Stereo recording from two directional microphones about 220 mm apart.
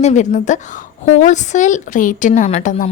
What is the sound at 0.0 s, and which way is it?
A woman's voice, 35° left (ahead or behind).